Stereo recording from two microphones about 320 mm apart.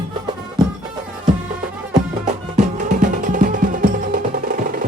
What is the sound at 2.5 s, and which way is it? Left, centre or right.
Music, right.